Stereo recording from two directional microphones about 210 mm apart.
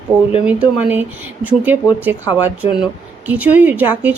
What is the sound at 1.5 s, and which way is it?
Speech, 10° right (ahead or behind).